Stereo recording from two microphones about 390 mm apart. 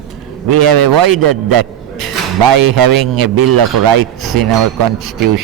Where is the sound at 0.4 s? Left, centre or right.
Right.